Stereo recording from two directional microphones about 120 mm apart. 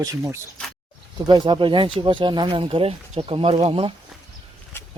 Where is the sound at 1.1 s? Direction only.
40° right (ahead or behind).